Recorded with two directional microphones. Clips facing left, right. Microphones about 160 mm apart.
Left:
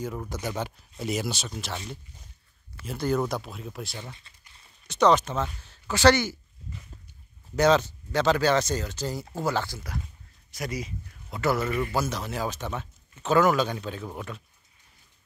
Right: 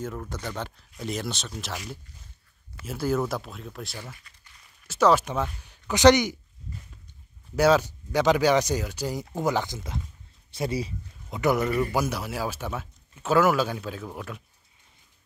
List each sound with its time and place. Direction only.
0.0 s speech: 5° left (ahead or behind)
2.8 s speech: 5° right (ahead or behind)
4.0 s speech: 25° left (ahead or behind)
4.8 s speech: 5° right (ahead or behind)
7.5 s speech: 10° right (ahead or behind)
10.5 s a sound: 30° right (ahead or behind)
11.3 s speech: 15° right (ahead or behind); by 14.3 s centre (ahead or behind)